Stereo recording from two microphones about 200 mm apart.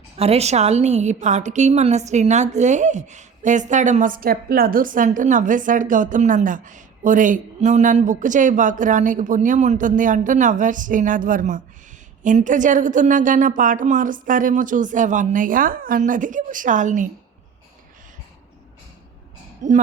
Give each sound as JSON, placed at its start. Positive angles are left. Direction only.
{"t": 0.2, "sound": "a woman's voice", "side_deg": -30}